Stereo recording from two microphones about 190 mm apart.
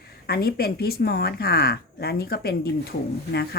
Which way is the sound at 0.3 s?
55° left (ahead or behind).